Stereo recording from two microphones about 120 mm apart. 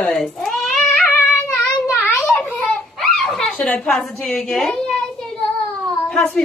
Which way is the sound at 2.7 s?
5° left (ahead or behind).